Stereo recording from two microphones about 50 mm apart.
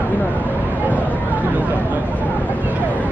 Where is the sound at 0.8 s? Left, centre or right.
Right.